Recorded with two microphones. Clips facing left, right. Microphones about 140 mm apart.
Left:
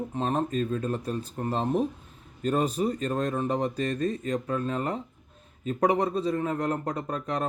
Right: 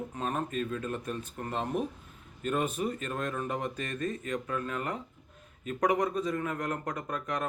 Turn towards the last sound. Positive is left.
turn(degrees=30)  # may be behind; listen again after turning